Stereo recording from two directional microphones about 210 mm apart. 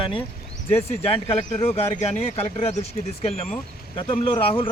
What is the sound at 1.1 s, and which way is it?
A man's voice, 30° left (ahead or behind).